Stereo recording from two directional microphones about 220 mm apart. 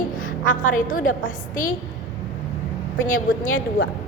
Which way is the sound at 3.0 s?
35° left (ahead or behind).